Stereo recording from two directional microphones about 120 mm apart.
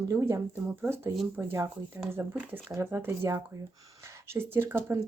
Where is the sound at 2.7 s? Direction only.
20° right (ahead or behind).